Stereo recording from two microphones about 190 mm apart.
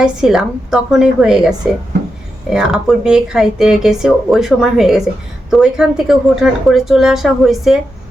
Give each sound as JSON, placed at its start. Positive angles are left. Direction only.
{"t": 0.0, "sound": "speech", "side_deg": -5}